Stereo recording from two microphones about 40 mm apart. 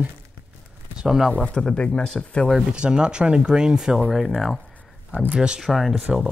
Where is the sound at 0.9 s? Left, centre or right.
Centre.